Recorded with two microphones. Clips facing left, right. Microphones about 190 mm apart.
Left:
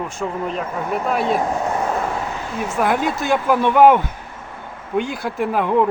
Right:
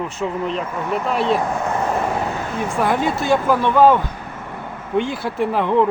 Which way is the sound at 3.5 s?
15° left (ahead or behind).